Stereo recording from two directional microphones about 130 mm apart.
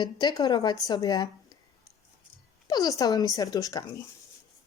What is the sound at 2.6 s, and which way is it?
Speech, 30° left (ahead or behind).